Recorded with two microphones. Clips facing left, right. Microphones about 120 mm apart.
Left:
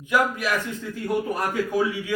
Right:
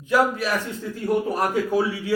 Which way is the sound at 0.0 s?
35° right (ahead or behind).